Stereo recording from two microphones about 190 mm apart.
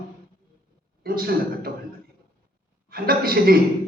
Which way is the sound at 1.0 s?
50° right (ahead or behind).